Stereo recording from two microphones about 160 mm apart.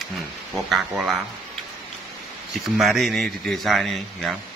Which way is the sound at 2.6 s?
Centre (ahead or behind).